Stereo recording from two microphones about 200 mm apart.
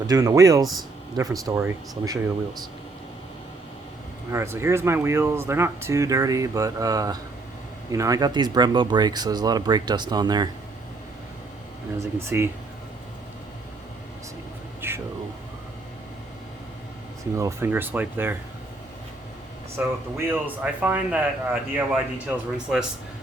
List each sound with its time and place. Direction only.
0.1 s speech: 15° right (ahead or behind)
4.3 s speech: 15° right (ahead or behind)
11.9 s speech: 10° right (ahead or behind)
14.8 s a sound: 10° right (ahead or behind)
17.3 s speech: 15° right (ahead or behind)
19.7 s speech: 10° right (ahead or behind)